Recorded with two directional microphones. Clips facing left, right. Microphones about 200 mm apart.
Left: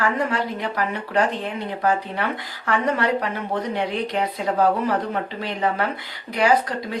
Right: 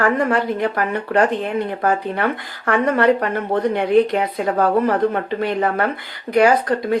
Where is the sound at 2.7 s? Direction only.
55° right (ahead or behind).